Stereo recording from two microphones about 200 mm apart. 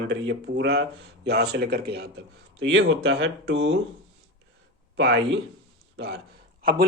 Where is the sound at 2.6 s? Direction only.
65° right (ahead or behind).